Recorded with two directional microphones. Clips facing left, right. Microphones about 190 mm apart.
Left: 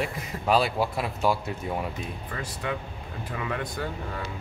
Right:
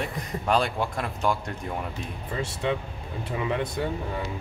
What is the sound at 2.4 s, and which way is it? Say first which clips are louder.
Speech: right 5 dB; 25° right (ahead or behind).